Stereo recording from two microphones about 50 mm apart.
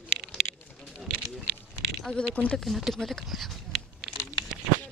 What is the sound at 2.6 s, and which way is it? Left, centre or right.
Speech, centre.